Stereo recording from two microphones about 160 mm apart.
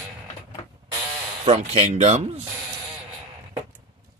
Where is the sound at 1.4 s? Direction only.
40° right (ahead or behind).